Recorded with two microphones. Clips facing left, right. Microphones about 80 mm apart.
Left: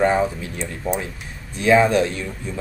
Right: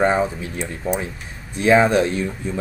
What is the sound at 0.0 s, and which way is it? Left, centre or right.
Speech, right.